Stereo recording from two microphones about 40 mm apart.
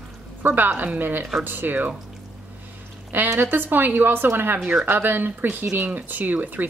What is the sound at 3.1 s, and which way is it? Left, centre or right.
Speech, right.